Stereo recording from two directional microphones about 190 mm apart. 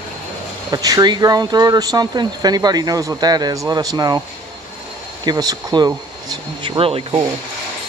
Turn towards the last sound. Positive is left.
turn(degrees=-25)  # may be behind; listen again after turning